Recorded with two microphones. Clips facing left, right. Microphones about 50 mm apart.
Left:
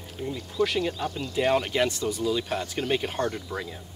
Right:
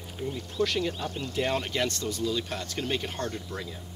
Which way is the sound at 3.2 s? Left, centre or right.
Left.